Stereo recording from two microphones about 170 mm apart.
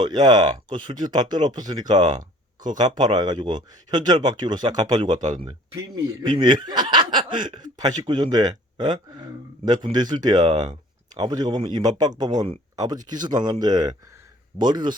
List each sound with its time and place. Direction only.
0.0 s speech: 25° right (ahead or behind)